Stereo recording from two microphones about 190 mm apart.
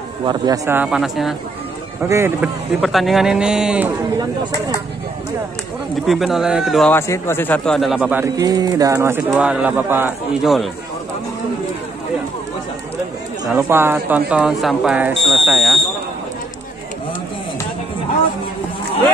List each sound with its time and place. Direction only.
0.2 s speech: 20° right (ahead or behind)
0.8 s a man's voice: centre (ahead or behind)
2.0 s speech: 15° right (ahead or behind)
2.8 s a man's voice: centre (ahead or behind)
6.0 s a man's voice: centre (ahead or behind)
6.9 s a man's voice: 15° left (ahead or behind)
13.5 s a man's voice: 10° right (ahead or behind)